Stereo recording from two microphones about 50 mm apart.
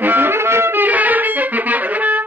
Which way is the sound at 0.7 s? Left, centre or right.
Right.